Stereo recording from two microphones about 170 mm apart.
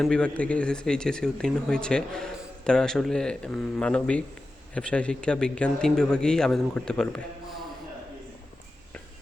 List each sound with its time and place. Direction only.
0.0 s speech: 5° left (ahead or behind)